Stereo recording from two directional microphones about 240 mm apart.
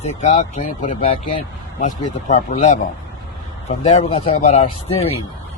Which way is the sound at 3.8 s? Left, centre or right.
Left.